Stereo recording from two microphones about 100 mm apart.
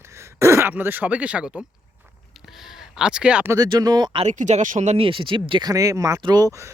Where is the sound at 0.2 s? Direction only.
25° right (ahead or behind).